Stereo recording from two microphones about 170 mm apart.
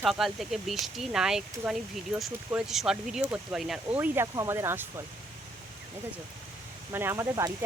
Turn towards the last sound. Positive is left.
turn(degrees=-15)  # may be behind; listen again after turning